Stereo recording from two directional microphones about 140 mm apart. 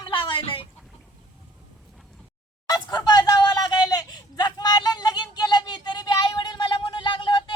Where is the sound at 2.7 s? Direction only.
30° left (ahead or behind).